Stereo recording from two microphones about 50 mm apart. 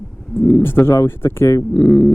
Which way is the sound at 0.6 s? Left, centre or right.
Left.